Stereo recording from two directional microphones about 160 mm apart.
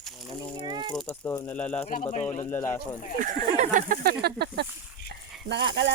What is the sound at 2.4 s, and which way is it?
Speech, 15° left (ahead or behind).